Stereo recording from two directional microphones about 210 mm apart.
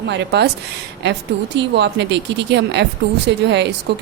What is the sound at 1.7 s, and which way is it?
Speech, 55° right (ahead or behind).